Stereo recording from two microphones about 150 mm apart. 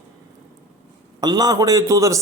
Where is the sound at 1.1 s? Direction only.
25° right (ahead or behind).